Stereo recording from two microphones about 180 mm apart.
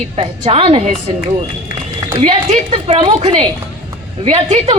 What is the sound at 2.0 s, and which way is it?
A woman's voice, 25° right (ahead or behind).